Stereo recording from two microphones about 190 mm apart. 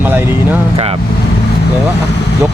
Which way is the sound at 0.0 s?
10° right (ahead or behind).